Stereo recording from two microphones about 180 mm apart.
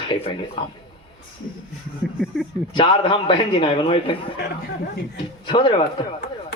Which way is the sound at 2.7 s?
25° left (ahead or behind).